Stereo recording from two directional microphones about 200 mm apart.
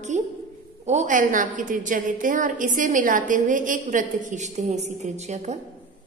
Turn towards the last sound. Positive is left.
turn(degrees=-35)  # may be behind; listen again after turning